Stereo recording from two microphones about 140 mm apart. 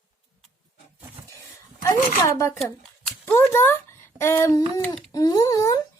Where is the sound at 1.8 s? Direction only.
20° left (ahead or behind).